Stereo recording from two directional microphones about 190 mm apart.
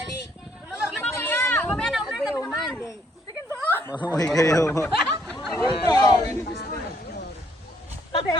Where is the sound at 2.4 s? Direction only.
5° left (ahead or behind).